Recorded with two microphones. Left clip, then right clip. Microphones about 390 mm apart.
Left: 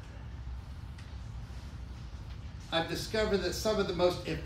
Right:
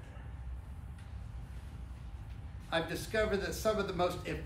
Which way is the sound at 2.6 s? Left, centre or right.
Centre.